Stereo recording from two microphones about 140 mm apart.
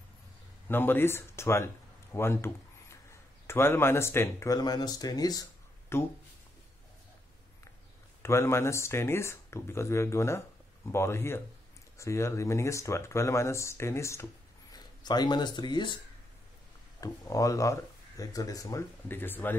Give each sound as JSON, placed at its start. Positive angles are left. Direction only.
{"t": 0.7, "sound": "speech", "side_deg": 15}
{"t": 2.1, "sound": "a sound", "side_deg": 15}
{"t": 3.4, "sound": "speech", "side_deg": 15}
{"t": 8.2, "sound": "speech", "side_deg": 20}
{"t": 14.7, "sound": "speech", "side_deg": 30}
{"t": 17.0, "sound": "speech", "side_deg": 25}